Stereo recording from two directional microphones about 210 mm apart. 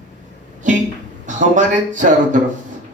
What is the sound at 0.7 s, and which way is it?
A man's voice, 35° right (ahead or behind).